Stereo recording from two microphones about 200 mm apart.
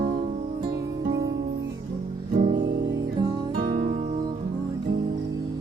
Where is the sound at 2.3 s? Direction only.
40° right (ahead or behind).